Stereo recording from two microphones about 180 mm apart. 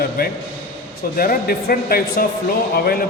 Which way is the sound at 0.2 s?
55° left (ahead or behind).